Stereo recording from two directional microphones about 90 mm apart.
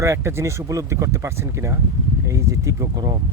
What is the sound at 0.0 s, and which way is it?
Speech, 35° right (ahead or behind).